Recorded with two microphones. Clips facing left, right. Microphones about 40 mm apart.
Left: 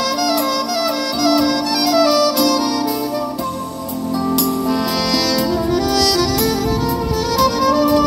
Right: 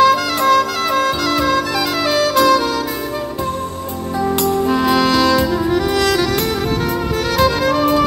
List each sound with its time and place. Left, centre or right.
0.0 s music: right
4.4 s music: right
7.3 s music: right